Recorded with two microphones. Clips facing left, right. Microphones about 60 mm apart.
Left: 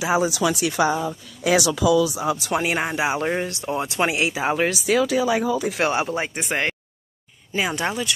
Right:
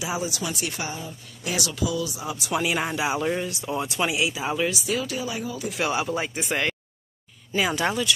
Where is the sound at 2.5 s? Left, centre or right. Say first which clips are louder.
Right 2 dB; left.